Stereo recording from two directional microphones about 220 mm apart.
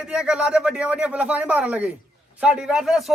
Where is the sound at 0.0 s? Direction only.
5° right (ahead or behind).